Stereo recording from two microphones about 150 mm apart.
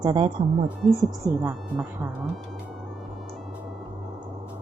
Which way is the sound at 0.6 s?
5° right (ahead or behind).